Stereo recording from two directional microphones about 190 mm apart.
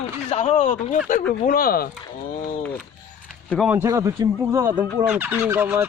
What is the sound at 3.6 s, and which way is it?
Speech, 15° right (ahead or behind).